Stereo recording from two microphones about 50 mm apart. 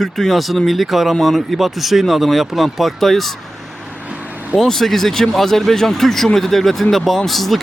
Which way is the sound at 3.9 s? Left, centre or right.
Right.